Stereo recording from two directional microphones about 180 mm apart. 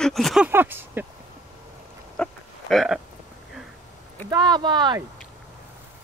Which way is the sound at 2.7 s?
Centre (ahead or behind).